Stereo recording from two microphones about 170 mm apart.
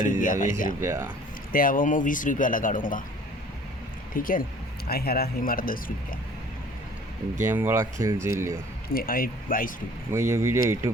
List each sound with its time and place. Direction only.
0.0 s speech: 50° left (ahead or behind)
0.8 s speech: 15° right (ahead or behind)
1.5 s speech: 55° left (ahead or behind)
4.1 s speech: 55° left (ahead or behind)
7.4 s speech: 15° right (ahead or behind)
8.9 s speech: 60° left (ahead or behind)
10.1 s speech: 15° right (ahead or behind)